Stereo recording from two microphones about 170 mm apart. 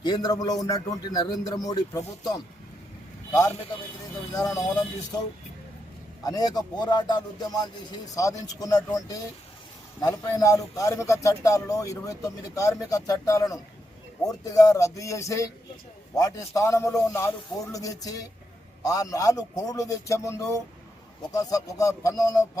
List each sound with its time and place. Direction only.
0.0 s speech: 25° left (ahead or behind)
4.3 s speech: 20° left (ahead or behind)
6.2 s speech: 20° left (ahead or behind)